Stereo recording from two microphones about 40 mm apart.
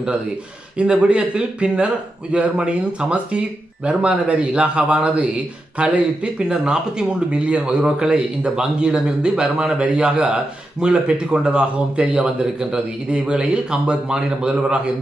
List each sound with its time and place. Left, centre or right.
0.7 s a man's voice: right